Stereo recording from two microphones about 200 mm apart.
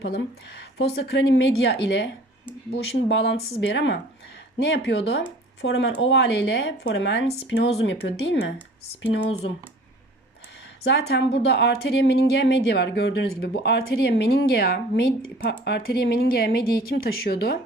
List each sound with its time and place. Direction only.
0.0 s speech: 55° left (ahead or behind)
10.8 s speech: 60° left (ahead or behind)